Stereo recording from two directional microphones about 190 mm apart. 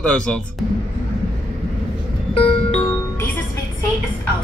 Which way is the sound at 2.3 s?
30° left (ahead or behind).